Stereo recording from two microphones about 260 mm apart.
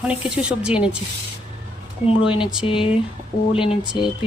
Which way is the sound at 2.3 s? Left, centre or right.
Centre.